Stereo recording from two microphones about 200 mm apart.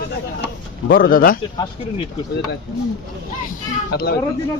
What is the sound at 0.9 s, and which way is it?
Speech, 45° left (ahead or behind).